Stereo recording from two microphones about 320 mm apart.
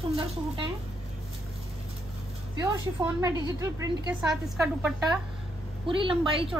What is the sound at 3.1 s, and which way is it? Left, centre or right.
A woman's voice, centre.